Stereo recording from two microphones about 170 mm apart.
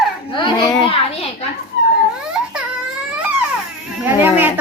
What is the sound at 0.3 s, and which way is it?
Speech, 25° left (ahead or behind).